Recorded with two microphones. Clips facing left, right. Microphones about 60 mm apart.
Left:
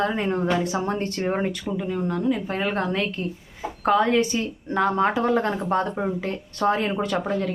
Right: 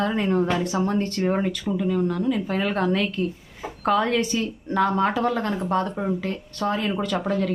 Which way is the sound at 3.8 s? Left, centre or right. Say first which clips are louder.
Left 2 dB; centre.